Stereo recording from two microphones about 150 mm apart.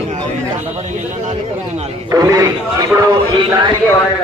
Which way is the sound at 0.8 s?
50° right (ahead or behind).